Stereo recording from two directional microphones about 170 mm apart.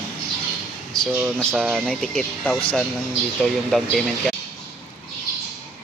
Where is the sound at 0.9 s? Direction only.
Centre (ahead or behind).